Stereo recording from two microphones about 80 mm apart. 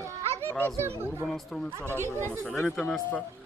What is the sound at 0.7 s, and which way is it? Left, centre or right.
Speech, right.